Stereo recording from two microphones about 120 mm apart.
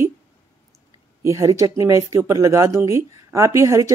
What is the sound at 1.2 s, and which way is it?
Speech, 25° right (ahead or behind).